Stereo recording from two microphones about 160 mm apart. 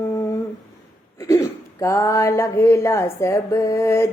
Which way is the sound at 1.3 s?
20° left (ahead or behind).